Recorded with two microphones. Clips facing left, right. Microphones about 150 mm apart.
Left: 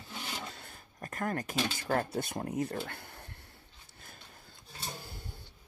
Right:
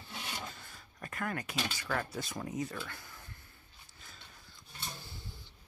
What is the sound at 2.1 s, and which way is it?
Speech, 55° left (ahead or behind).